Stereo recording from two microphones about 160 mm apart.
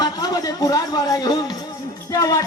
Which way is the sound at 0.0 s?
25° left (ahead or behind).